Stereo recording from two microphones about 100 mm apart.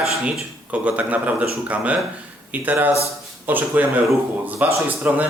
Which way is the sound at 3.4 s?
15° right (ahead or behind).